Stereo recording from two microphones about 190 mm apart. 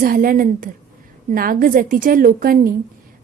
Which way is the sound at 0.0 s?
50° right (ahead or behind).